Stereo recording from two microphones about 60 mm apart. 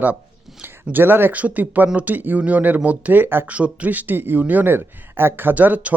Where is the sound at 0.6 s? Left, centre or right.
Right.